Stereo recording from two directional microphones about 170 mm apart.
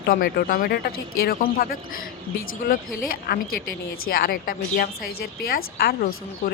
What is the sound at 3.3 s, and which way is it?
Speech, 60° left (ahead or behind).